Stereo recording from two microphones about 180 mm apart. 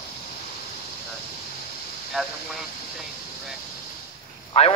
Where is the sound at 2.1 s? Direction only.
Centre (ahead or behind).